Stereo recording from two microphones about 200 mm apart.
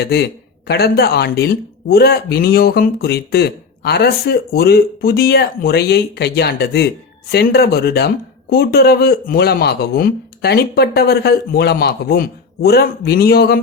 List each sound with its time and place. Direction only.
0.0 s a man's voice: 55° left (ahead or behind)